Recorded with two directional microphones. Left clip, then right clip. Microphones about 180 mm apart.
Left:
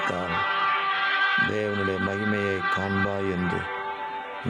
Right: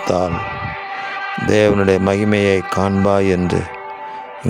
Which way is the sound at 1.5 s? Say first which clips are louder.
Right 13 dB; 65° right (ahead or behind).